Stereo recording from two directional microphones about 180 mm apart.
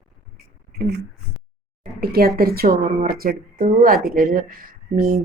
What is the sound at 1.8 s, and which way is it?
Speech, 60° right (ahead or behind).